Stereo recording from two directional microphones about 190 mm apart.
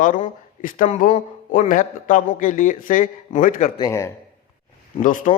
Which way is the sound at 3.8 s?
15° left (ahead or behind).